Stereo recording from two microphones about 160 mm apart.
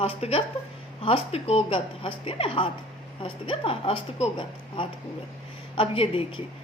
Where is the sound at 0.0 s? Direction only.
40° left (ahead or behind).